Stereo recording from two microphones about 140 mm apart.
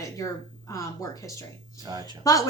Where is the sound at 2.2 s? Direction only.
25° left (ahead or behind).